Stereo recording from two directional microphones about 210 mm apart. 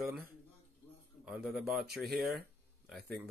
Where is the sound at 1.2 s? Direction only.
5° right (ahead or behind).